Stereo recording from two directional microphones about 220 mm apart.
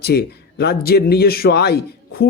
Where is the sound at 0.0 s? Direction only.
45° left (ahead or behind).